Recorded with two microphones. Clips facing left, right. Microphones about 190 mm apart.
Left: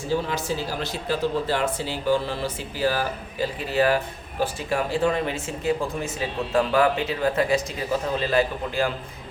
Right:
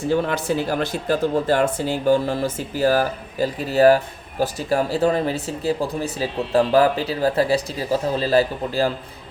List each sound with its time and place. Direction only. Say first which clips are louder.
0.1 s speech: right 4 dB; 55° right (ahead or behind); by 8.9 s 35° right (ahead or behind)